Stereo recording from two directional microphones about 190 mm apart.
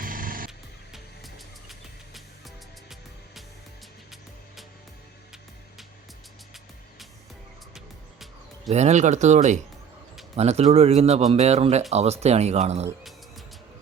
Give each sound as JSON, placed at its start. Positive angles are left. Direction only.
{"t": 0.0, "sound": "music", "side_deg": -45}
{"t": 0.9, "sound": "music", "side_deg": 0}
{"t": 8.7, "sound": "a man's voice", "side_deg": -35}